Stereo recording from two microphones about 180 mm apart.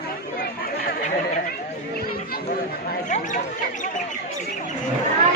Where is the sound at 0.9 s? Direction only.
40° left (ahead or behind).